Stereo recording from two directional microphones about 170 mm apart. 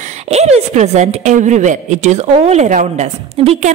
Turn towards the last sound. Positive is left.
turn(degrees=-40)  # may be behind; listen again after turning